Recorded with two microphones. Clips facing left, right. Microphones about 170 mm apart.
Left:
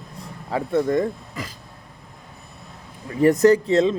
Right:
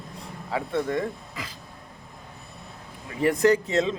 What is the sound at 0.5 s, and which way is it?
Speech, 40° left (ahead or behind).